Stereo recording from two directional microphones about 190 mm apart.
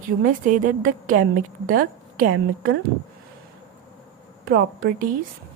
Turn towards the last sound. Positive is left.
turn(degrees=-50)  # may be behind; listen again after turning